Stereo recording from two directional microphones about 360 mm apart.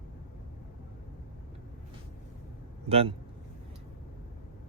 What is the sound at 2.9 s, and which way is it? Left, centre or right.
Speech, centre.